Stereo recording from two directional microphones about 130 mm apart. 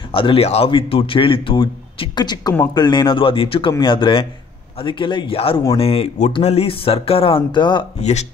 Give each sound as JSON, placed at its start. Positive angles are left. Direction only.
{"t": 0.1, "sound": "a man's voice", "side_deg": 40}
{"t": 8.0, "sound": "speech", "side_deg": 60}